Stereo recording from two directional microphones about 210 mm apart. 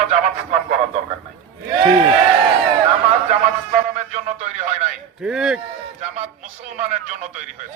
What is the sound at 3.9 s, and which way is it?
A man's voice, 35° right (ahead or behind).